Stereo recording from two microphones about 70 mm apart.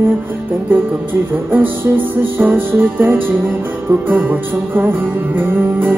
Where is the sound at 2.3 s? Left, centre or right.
Right.